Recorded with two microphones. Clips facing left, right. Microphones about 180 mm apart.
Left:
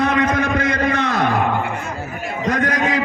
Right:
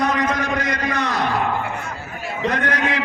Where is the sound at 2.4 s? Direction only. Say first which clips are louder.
Left 2 dB; 45° left (ahead or behind).